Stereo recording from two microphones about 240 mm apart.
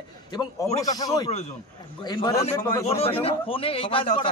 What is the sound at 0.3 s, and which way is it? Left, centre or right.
A man's voice, centre.